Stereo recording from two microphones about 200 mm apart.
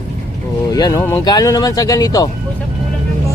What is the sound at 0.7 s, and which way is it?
Speech, 20° left (ahead or behind).